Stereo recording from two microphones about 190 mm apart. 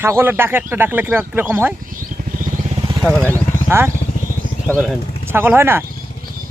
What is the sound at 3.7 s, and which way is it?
Speech, 15° right (ahead or behind).